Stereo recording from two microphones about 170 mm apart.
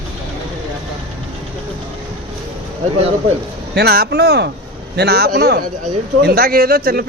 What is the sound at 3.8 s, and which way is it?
A man's voice, 65° right (ahead or behind).